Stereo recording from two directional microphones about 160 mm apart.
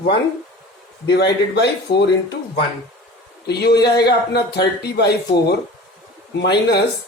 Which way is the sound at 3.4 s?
90° left.